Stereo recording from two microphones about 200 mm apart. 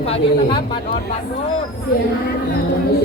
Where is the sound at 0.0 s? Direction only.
30° left (ahead or behind).